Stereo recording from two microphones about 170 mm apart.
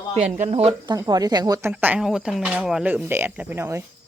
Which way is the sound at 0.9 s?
20° right (ahead or behind).